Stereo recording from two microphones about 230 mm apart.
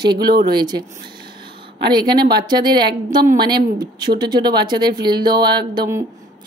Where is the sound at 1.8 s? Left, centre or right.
Centre.